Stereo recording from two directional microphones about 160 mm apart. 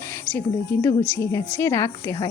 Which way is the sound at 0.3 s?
15° left (ahead or behind).